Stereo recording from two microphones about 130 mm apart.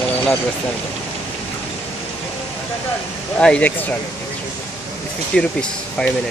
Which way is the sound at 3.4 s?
10° left (ahead or behind).